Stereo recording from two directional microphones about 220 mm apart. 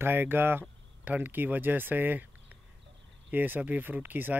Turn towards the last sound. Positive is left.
turn(degrees=-10)  # may be behind; listen again after turning